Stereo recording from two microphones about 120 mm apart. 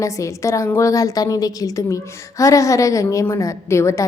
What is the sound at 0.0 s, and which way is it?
A woman's voice, 25° left (ahead or behind).